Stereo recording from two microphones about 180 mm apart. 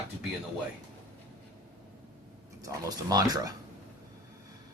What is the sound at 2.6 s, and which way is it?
Speech, 20° right (ahead or behind).